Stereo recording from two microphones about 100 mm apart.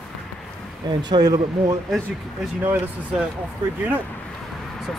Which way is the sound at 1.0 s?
45° right (ahead or behind).